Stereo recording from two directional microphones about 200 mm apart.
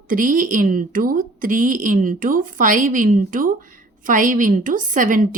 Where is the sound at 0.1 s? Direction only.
40° right (ahead or behind).